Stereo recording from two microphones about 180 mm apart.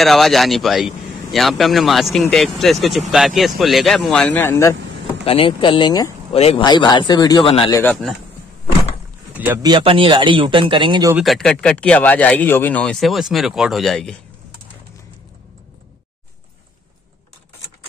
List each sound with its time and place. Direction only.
0.0 s a man's voice: centre (ahead or behind)
5.2 s speech: 30° left (ahead or behind)
6.3 s speech: 35° left (ahead or behind)
6.6 s speech: 25° left (ahead or behind)
9.3 s speech: 10° right (ahead or behind)
9.6 s speech: 25° right (ahead or behind)
11.1 s a man's voice: centre (ahead or behind)